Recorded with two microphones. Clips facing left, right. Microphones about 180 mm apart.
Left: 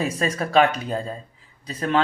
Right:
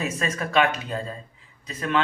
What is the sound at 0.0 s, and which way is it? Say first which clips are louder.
Speech: left 3 dB; 35° left (ahead or behind).